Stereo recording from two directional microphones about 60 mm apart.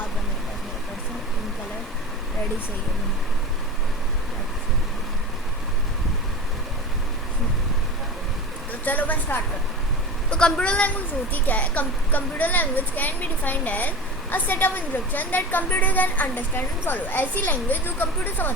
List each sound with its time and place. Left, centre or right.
8.8 s a woman's voice: left
10.2 s a child's voice: centre; by 18.5 s left